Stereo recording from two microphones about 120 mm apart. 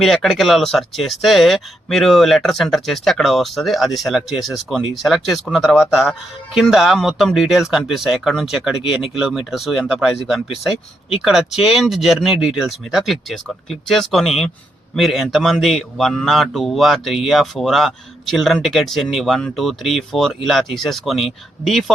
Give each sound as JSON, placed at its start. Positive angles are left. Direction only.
{"t": 0.0, "sound": "speech", "side_deg": 0}